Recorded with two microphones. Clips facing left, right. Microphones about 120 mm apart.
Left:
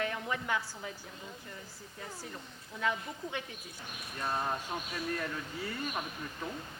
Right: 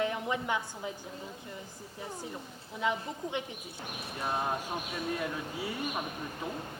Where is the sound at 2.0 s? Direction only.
20° right (ahead or behind).